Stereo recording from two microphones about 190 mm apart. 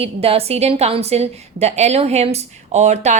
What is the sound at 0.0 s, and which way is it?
A woman's voice, 30° right (ahead or behind).